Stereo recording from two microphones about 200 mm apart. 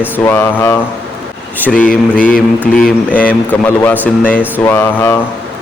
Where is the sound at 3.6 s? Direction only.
5° left (ahead or behind).